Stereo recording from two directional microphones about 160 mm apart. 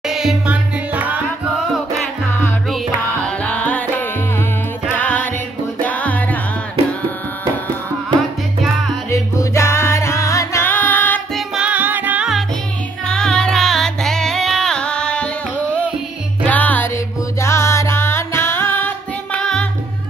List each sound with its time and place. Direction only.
0.1 s music: 5° right (ahead or behind)
3.3 s music: 10° left (ahead or behind)
4.9 s music: 10° left (ahead or behind)
9.1 s music: 20° left (ahead or behind)
11.3 s music: 5° right (ahead or behind)